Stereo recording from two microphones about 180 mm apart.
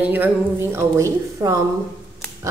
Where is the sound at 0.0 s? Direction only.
10° right (ahead or behind).